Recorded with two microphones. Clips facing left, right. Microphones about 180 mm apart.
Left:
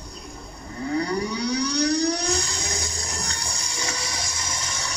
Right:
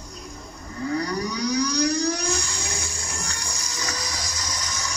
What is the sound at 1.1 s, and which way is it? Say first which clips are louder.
Civil defense siren: left 1 dB; 30° left (ahead or behind).